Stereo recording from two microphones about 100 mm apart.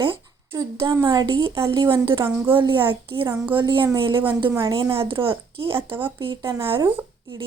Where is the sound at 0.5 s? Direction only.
30° right (ahead or behind).